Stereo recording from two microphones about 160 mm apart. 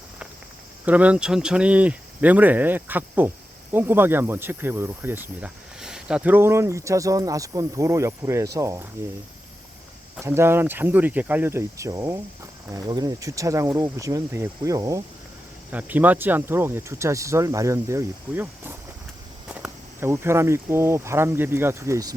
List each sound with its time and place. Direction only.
0.9 s speech: 10° right (ahead or behind)
10.2 s speech: 15° right (ahead or behind)
15.7 s speech: 10° right (ahead or behind)